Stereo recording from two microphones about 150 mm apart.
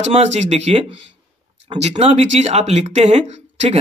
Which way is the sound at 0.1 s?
50° right (ahead or behind).